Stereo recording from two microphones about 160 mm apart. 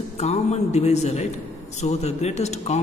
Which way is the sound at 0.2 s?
45° left (ahead or behind).